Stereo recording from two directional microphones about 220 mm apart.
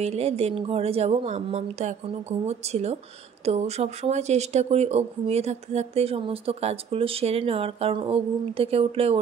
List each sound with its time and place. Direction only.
0.0 s speech: 30° right (ahead or behind)